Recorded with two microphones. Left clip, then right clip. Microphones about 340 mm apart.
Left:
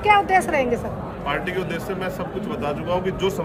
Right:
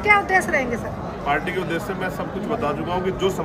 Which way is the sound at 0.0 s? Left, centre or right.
Left.